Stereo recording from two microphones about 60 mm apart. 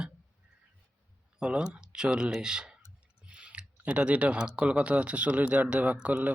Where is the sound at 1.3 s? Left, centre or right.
Centre.